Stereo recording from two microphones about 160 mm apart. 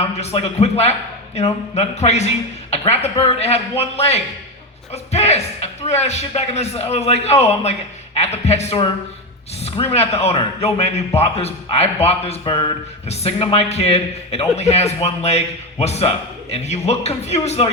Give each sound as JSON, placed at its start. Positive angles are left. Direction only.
{"t": 0.0, "sound": "a man's voice", "side_deg": 40}